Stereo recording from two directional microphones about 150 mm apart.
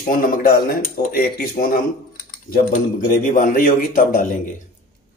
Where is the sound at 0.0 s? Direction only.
70° left (ahead or behind).